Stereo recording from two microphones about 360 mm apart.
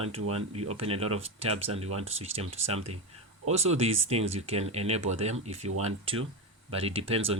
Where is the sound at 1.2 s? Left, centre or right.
Centre.